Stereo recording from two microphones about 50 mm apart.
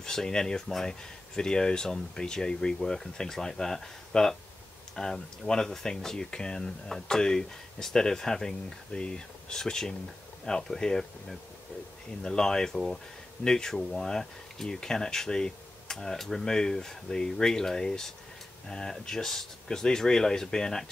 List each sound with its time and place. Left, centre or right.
0.0 s speech: centre